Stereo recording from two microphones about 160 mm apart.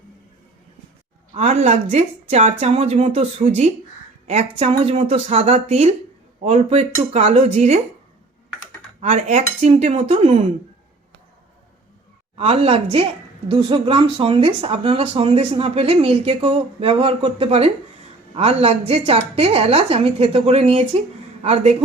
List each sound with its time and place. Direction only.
1.3 s speech: 45° right (ahead or behind)
9.0 s speech: 45° right (ahead or behind)
12.4 s speech: 35° right (ahead or behind)